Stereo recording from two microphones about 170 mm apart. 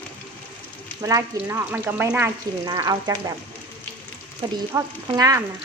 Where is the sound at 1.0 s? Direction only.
15° right (ahead or behind).